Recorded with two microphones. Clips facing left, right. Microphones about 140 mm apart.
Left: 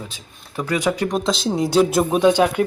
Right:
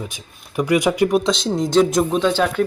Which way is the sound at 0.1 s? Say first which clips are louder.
Right 1 dB; 15° right (ahead or behind).